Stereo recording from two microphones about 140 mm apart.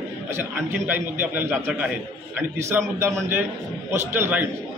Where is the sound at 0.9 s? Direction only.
10° right (ahead or behind).